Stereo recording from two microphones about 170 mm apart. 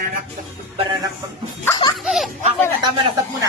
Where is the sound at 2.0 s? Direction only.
Centre (ahead or behind).